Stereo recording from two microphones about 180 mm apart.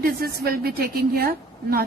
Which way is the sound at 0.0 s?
60° right (ahead or behind).